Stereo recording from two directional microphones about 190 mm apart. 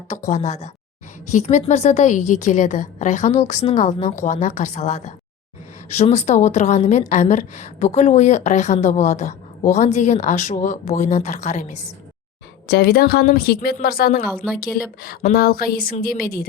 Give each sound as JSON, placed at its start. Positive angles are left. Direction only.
{"t": 0.3, "sound": "a woman's voice", "side_deg": 35}
{"t": 12.6, "sound": "a woman's voice", "side_deg": 55}